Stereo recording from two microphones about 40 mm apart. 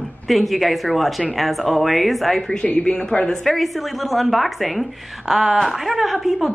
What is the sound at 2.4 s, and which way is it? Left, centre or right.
Speech, left.